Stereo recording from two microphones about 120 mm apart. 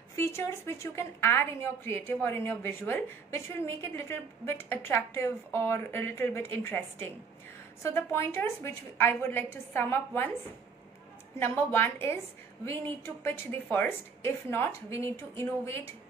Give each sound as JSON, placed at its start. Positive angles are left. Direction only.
{"t": 0.1, "sound": "a woman's voice", "side_deg": 25}
{"t": 11.3, "sound": "a woman's voice", "side_deg": 20}